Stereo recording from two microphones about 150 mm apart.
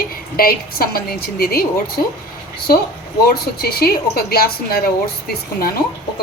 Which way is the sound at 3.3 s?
90° left.